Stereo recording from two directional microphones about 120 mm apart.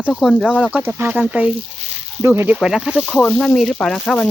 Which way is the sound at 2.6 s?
5° right (ahead or behind).